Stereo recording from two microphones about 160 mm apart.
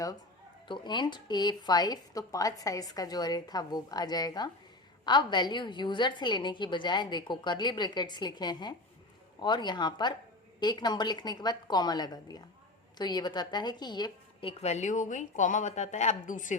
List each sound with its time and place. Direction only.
0.7 s a woman's voice: 30° left (ahead or behind)
14.6 s speech: 45° left (ahead or behind)